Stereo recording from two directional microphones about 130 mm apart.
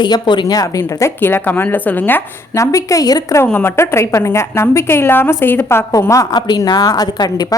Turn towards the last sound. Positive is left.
turn(degrees=30)  # may be behind; listen again after turning